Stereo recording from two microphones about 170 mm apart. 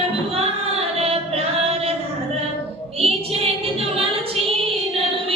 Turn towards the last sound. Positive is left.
turn(degrees=-35)  # may be behind; listen again after turning